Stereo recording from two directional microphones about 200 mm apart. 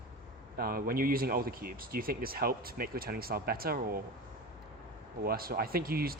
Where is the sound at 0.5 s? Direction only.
45° right (ahead or behind).